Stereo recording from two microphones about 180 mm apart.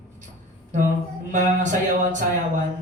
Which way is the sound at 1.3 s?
45° right (ahead or behind).